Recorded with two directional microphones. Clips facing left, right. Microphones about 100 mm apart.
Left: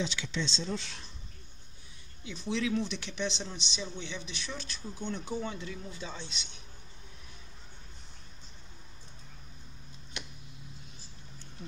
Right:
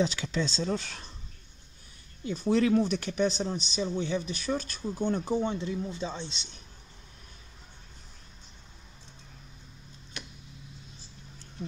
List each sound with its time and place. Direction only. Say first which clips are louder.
0.0 s speech: right 6 dB; 40° right (ahead or behind)
2.2 s speech: right 8 dB; 45° right (ahead or behind)
5.3 s speech: right 7 dB; 30° right (ahead or behind)